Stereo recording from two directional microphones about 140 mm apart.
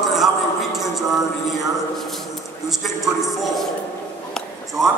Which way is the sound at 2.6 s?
Centre (ahead or behind).